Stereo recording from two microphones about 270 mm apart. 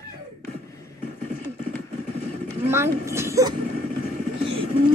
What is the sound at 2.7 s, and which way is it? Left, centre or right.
Speech, centre.